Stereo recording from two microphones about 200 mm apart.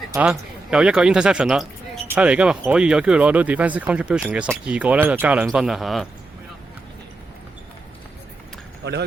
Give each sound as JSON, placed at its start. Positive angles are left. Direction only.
{"t": 0.1, "sound": "speech", "side_deg": -5}
{"t": 8.8, "sound": "speech", "side_deg": -55}